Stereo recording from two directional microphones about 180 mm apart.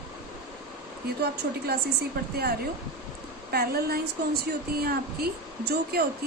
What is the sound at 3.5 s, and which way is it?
Speech, 60° right (ahead or behind).